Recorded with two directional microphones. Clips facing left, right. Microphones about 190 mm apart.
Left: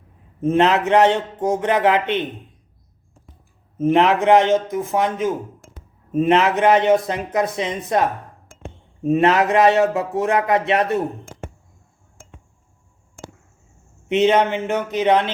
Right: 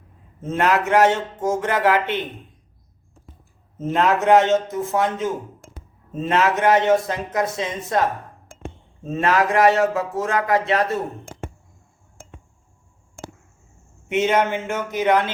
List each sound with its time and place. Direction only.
0.4 s a man's voice: 20° left (ahead or behind)
3.8 s a man's voice: 15° left (ahead or behind)
14.1 s a man's voice: 20° left (ahead or behind)